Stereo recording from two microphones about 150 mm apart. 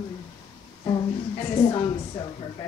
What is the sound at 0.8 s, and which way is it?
A woman's voice, 35° left (ahead or behind).